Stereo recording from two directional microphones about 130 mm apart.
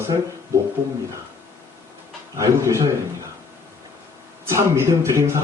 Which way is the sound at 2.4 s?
25° right (ahead or behind).